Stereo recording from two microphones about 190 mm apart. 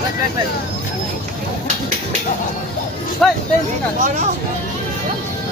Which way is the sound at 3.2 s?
5° left (ahead or behind).